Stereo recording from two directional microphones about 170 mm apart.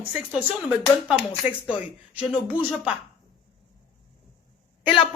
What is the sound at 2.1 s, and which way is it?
Speech, 10° right (ahead or behind).